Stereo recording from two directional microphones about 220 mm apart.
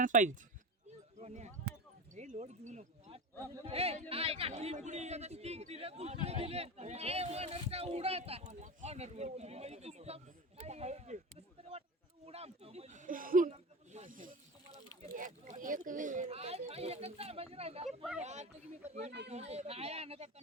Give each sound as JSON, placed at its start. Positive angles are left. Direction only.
{"t": 0.0, "sound": "speech", "side_deg": -35}
{"t": 12.2, "sound": "speech", "side_deg": -30}